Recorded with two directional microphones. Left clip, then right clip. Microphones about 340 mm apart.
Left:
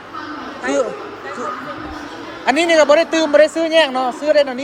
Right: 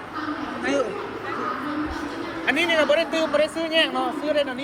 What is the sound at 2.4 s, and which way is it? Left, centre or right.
Speech, centre.